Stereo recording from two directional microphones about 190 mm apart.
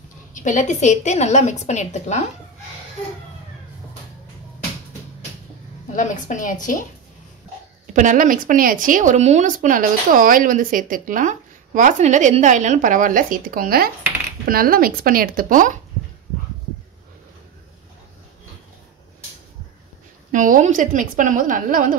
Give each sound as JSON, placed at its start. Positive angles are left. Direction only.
{"t": 0.3, "sound": "a woman's voice", "side_deg": 40}
{"t": 5.9, "sound": "a woman's voice", "side_deg": 40}
{"t": 7.8, "sound": "speech", "side_deg": -40}
{"t": 20.2, "sound": "speech", "side_deg": -45}